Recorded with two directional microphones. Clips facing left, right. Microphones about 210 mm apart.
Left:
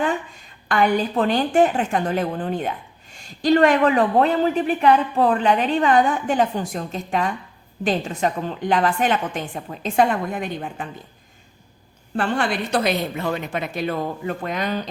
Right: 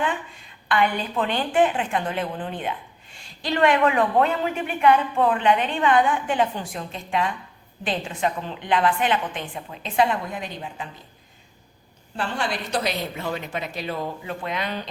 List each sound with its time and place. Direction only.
0.7 s a woman's voice: 40° left (ahead or behind)
12.1 s speech: 55° left (ahead or behind)